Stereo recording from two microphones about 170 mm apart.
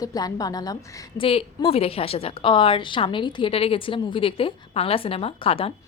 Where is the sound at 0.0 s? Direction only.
20° left (ahead or behind).